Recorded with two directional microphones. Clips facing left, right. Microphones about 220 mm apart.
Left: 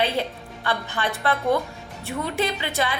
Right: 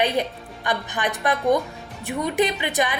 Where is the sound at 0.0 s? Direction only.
15° right (ahead or behind).